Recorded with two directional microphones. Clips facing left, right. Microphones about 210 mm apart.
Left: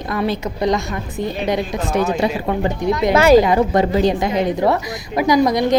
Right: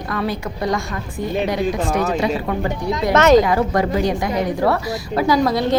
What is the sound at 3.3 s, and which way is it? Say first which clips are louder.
A woman's voice: left 2 dB; 20° left (ahead or behind).